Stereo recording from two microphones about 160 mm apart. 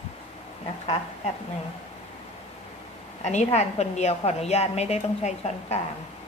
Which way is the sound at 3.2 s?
45° left (ahead or behind).